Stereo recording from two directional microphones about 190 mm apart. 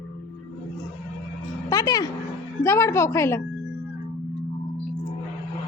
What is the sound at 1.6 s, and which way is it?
Speech, 20° left (ahead or behind).